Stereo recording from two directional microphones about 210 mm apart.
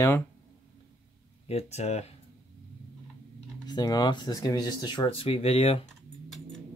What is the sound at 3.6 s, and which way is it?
Speech, 20° left (ahead or behind).